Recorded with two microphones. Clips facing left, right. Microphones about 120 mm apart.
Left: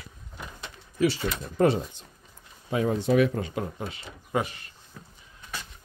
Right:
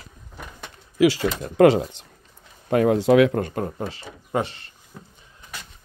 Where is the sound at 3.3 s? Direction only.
50° right (ahead or behind); by 4.6 s 30° right (ahead or behind).